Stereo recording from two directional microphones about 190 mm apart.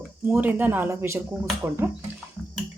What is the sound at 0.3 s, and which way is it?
Speech, 10° right (ahead or behind).